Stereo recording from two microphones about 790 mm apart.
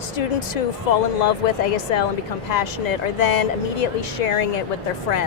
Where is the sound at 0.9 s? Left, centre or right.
Left.